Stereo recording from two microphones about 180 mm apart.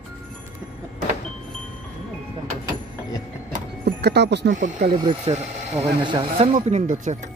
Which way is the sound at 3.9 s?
70° right (ahead or behind).